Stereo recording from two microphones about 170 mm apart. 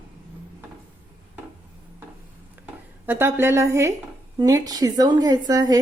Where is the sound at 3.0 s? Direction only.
10° right (ahead or behind).